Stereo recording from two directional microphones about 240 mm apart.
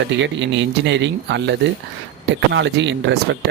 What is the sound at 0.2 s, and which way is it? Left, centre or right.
Speech, right.